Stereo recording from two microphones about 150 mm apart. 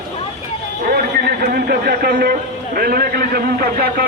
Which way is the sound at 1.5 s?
90° right.